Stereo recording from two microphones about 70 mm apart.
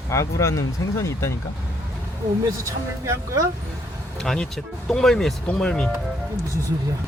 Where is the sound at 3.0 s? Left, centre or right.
Right.